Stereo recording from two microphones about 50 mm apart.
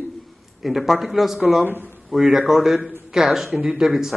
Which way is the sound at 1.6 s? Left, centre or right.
Right.